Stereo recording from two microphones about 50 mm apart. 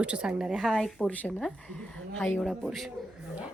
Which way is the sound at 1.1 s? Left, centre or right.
Left.